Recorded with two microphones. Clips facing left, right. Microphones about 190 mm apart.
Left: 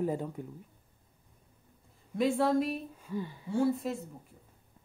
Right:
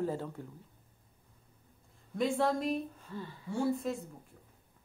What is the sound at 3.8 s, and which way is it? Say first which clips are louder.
Speech: left 1 dB; 5° left (ahead or behind).